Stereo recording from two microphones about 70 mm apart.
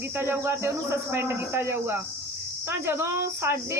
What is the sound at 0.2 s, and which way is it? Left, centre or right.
Speech, right.